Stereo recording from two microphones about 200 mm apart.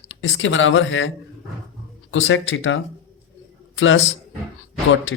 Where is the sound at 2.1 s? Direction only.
75° left (ahead or behind).